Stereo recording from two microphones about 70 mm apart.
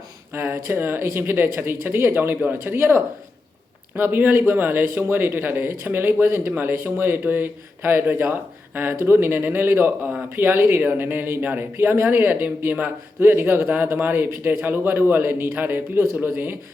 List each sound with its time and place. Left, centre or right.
0.5 s speech: right